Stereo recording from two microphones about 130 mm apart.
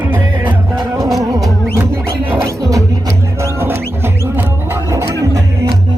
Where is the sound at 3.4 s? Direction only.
20° right (ahead or behind).